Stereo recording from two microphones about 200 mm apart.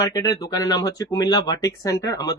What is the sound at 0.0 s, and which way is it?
Speech, 20° left (ahead or behind).